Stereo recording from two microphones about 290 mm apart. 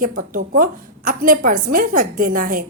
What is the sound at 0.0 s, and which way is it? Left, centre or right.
A woman's voice, right.